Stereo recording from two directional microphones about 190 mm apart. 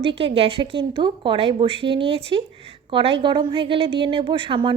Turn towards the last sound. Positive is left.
turn(degrees=-25)  # may be behind; listen again after turning